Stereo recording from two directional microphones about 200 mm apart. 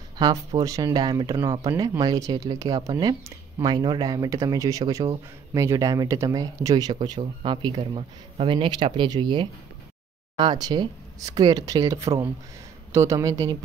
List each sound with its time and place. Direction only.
0.2 s speech: 20° right (ahead or behind)